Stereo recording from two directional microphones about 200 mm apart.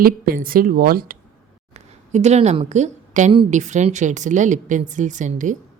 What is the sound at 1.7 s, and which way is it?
A woman's voice, 35° right (ahead or behind).